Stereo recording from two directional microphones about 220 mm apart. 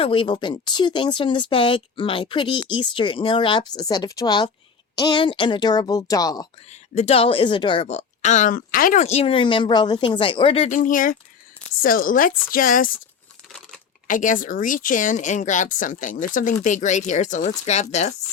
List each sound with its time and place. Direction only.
0.0 s a woman's voice: 25° left (ahead or behind)
6.7 s a woman's voice: 30° left (ahead or behind)
13.5 s typing: centre (ahead or behind)
14.1 s speech: 35° left (ahead or behind)